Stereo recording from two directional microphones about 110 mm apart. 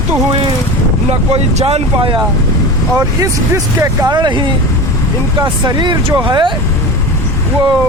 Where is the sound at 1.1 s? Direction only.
70° right (ahead or behind).